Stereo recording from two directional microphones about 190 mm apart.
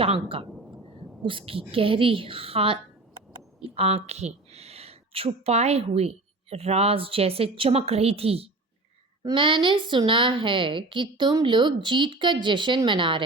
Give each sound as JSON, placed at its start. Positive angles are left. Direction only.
{"t": 0.0, "sound": "a woman's voice", "side_deg": -30}
{"t": 3.8, "sound": "a woman's voice", "side_deg": -30}